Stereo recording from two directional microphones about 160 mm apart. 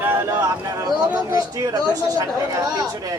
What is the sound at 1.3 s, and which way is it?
Speech, 25° right (ahead or behind).